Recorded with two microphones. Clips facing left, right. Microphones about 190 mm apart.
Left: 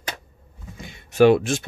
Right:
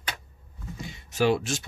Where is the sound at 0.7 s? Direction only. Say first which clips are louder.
Left 9 dB; 55° left (ahead or behind).